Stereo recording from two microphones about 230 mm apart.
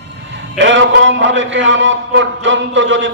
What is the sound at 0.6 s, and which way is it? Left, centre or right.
A man's voice, right.